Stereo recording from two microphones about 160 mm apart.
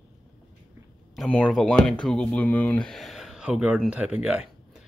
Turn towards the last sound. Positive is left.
turn(degrees=-10)  # may be behind; listen again after turning